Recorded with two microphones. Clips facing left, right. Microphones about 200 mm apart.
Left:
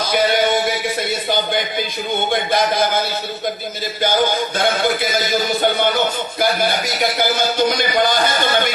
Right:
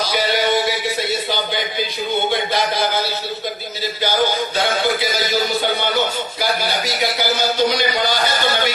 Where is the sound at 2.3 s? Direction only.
50° left (ahead or behind).